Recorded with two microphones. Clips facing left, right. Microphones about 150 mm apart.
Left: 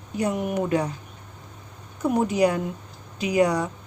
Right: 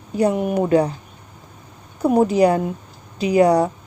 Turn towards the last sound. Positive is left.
turn(degrees=-35)  # may be behind; listen again after turning